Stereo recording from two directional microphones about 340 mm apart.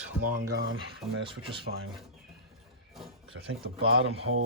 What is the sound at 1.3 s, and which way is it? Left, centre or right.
Cutlery, centre.